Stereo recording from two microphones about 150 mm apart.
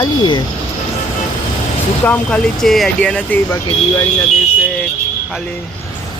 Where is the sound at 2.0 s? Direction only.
10° left (ahead or behind).